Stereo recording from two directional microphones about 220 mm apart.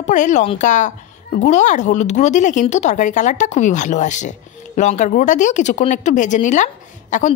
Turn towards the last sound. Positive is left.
turn(degrees=35)  # may be behind; listen again after turning